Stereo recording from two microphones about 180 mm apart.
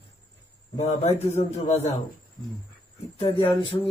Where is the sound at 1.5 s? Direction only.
35° left (ahead or behind).